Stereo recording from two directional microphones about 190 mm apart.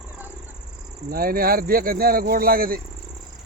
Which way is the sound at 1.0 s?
50° right (ahead or behind).